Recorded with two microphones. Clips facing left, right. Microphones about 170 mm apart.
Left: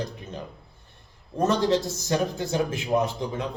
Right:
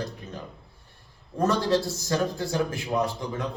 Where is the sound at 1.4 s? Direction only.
20° left (ahead or behind).